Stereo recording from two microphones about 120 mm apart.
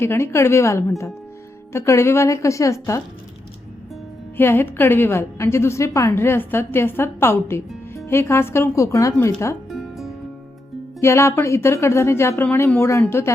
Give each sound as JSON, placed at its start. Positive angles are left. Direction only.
{"t": 0.0, "sound": "a woman's voice", "side_deg": 20}
{"t": 4.4, "sound": "a woman's voice", "side_deg": 15}
{"t": 9.6, "sound": "music", "side_deg": 0}
{"t": 11.0, "sound": "a woman's voice", "side_deg": 20}